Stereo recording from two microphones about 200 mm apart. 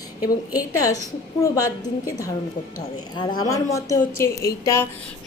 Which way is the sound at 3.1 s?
20° left (ahead or behind).